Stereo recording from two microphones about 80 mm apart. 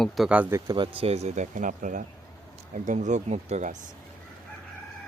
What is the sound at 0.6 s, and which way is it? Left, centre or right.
Speech, right.